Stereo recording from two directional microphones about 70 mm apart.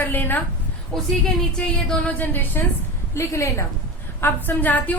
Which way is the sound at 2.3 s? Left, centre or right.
Left.